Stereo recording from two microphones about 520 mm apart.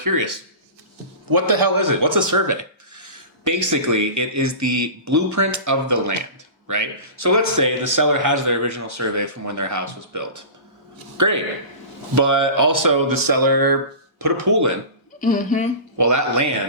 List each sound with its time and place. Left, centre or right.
0.0 s speech: right
15.2 s speech: centre
16.0 s speech: right